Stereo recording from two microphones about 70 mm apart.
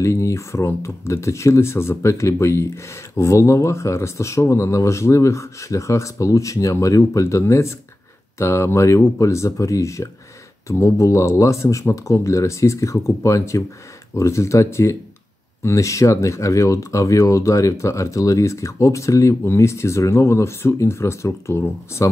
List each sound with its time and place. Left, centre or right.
0.0 s speech: left